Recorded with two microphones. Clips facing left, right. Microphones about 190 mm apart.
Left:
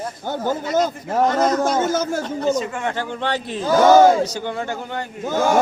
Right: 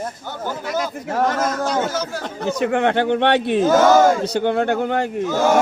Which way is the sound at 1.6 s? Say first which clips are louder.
Left 2 dB; 50° left (ahead or behind).